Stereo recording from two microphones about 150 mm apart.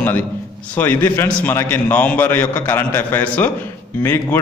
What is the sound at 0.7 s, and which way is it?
A man's voice, 15° left (ahead or behind).